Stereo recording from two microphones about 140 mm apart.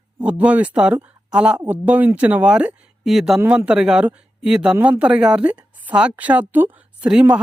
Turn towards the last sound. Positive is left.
turn(degrees=-5)  # may be behind; listen again after turning